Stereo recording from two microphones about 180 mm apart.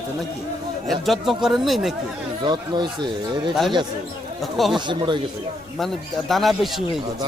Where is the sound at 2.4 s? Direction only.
25° right (ahead or behind).